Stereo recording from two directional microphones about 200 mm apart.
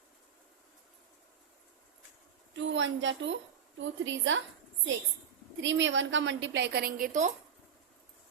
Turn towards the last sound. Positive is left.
turn(degrees=-40)  # may be behind; listen again after turning